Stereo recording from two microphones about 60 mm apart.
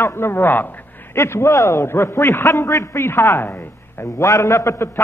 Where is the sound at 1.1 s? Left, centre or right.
Left.